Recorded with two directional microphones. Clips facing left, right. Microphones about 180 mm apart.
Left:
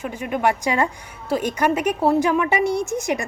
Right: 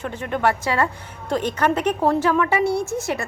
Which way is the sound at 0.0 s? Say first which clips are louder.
Even; 10° left (ahead or behind).